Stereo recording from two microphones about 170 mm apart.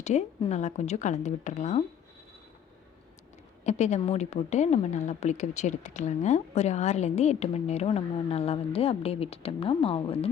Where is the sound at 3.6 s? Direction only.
40° left (ahead or behind).